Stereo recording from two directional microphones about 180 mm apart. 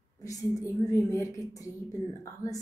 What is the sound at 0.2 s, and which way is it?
Speech, 20° left (ahead or behind).